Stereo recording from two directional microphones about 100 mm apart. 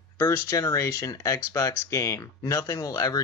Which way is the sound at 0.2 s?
35° left (ahead or behind).